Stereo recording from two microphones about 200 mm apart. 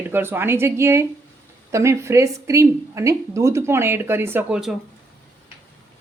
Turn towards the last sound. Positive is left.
turn(degrees=-5)  # may be behind; listen again after turning